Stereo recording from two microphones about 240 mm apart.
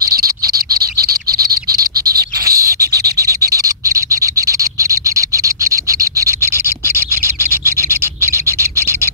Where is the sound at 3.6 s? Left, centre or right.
Centre.